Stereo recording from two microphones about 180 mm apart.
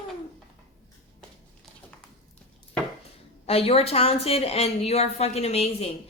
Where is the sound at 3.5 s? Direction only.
35° left (ahead or behind).